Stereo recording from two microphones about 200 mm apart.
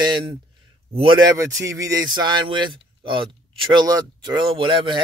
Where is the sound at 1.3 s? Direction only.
15° right (ahead or behind).